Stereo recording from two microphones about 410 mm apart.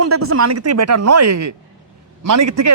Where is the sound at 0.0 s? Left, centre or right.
Right.